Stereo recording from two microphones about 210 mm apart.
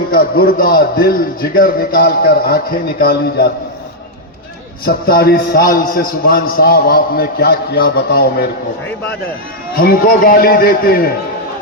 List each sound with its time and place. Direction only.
0.1 s a man's voice: 45° left (ahead or behind)
4.9 s a man's voice: 45° left (ahead or behind)
9.8 s a man's voice: 45° left (ahead or behind)